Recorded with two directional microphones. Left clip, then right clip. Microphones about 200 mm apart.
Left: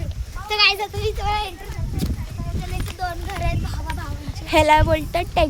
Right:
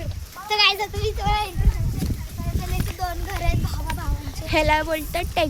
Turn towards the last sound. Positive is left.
turn(degrees=15)  # may be behind; listen again after turning